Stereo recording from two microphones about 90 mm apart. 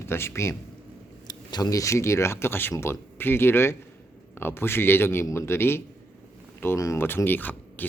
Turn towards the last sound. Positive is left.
turn(degrees=20)  # may be behind; listen again after turning